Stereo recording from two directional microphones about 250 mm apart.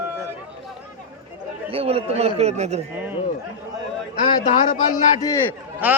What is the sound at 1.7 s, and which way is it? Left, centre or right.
A man's voice, right.